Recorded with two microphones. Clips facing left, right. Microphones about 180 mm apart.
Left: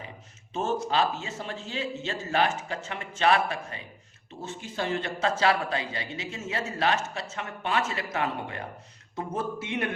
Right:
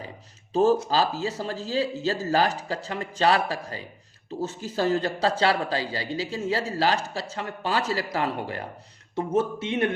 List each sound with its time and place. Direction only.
0.5 s a man's voice: 35° right (ahead or behind)